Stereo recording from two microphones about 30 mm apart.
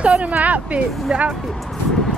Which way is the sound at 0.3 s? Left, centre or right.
Right.